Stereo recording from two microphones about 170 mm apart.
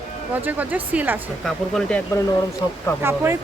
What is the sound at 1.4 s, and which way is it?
Speech, 5° left (ahead or behind).